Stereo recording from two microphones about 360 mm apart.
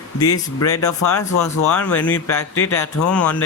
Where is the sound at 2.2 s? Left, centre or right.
Left.